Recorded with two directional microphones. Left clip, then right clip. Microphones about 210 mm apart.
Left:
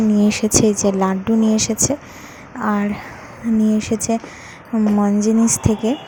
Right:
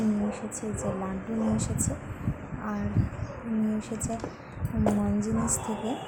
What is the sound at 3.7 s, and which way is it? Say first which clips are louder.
Speech: left 14 dB; 40° left (ahead or behind).